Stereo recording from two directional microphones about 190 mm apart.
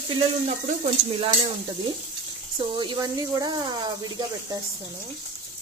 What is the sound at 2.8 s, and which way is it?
Speech, 20° right (ahead or behind).